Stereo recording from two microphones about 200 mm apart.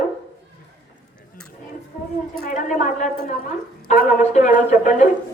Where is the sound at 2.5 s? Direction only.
40° left (ahead or behind).